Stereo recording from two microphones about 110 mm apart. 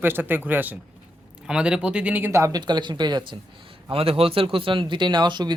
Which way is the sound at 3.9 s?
60° right (ahead or behind).